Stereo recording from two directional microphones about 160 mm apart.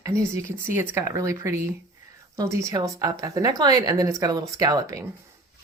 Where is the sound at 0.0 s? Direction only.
20° right (ahead or behind).